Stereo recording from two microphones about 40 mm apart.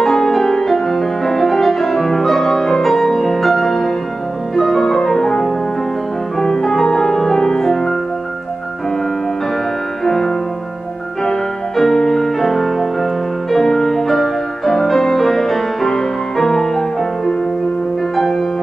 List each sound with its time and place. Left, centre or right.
0.0 s music: centre
10.0 s music: centre